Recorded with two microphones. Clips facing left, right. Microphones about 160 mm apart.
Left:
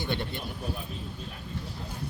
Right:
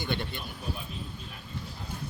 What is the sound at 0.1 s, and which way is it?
Speech, 30° left (ahead or behind).